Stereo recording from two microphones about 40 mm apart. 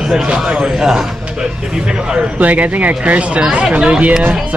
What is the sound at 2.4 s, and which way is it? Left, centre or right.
Speech, right.